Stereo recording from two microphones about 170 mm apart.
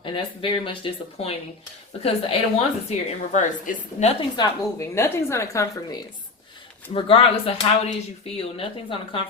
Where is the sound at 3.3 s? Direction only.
45° left (ahead or behind).